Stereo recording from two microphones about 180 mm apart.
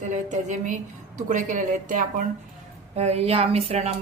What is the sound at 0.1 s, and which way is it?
A woman's voice, 45° right (ahead or behind).